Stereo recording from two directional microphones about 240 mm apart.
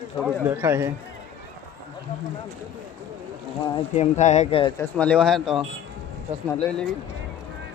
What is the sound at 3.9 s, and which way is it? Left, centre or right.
Speech, left.